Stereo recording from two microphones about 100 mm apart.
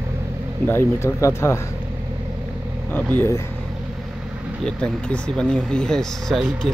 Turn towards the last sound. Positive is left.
turn(degrees=0)  # may be behind; listen again after turning